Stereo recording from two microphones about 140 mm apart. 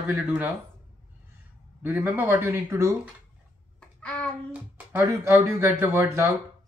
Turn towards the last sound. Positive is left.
turn(degrees=-20)  # may be behind; listen again after turning